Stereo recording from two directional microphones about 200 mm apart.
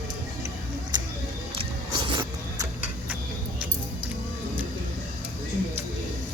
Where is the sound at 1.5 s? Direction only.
25° right (ahead or behind).